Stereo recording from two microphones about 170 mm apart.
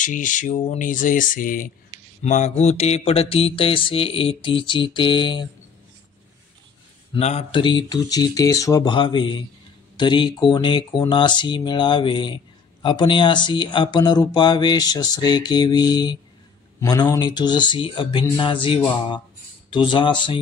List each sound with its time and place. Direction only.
0.0 s speech: 50° left (ahead or behind)
2.2 s mantra: 45° left (ahead or behind); by 5.5 s 25° left (ahead or behind)
7.2 s speech: 40° left (ahead or behind)